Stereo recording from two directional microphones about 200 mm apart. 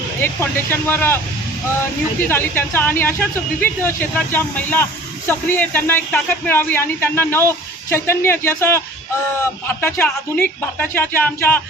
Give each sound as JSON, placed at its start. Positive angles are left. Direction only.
{"t": 0.2, "sound": "speech", "side_deg": 10}
{"t": 2.2, "sound": "speech", "side_deg": 10}